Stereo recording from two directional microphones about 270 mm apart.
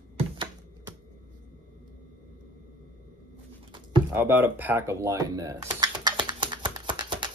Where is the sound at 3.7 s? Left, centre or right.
Centre.